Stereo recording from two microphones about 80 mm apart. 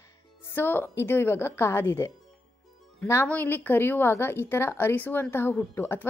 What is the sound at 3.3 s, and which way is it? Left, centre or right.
A woman's voice, left.